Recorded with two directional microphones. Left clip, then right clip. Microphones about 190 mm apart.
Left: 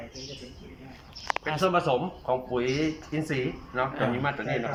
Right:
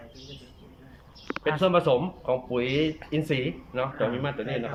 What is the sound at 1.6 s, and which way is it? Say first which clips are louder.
Speech: right 2 dB; 10° right (ahead or behind).